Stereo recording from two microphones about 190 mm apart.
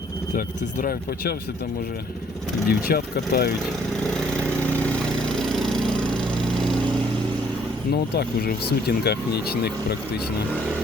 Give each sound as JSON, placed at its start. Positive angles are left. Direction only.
{"t": 0.3, "sound": "speech", "side_deg": 50}
{"t": 2.6, "sound": "speech", "side_deg": 55}
{"t": 5.3, "sound": "lawn mower", "side_deg": 0}
{"t": 8.1, "sound": "speech", "side_deg": 55}